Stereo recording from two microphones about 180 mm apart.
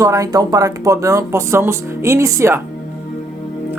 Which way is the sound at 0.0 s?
20° right (ahead or behind).